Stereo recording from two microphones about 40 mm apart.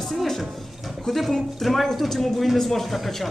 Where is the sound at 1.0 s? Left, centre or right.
Centre.